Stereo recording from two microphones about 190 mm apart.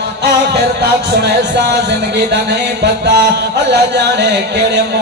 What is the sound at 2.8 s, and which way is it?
Music, 60° right (ahead or behind).